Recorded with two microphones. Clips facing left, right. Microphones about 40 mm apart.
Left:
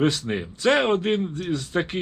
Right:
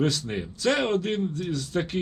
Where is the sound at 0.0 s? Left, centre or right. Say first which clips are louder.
Left 3 dB; left.